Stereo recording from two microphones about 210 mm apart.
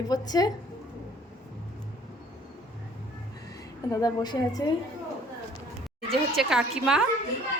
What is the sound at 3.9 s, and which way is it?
Speech, 15° left (ahead or behind).